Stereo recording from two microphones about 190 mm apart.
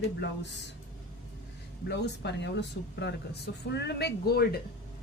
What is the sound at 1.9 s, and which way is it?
A woman's voice, 65° left (ahead or behind).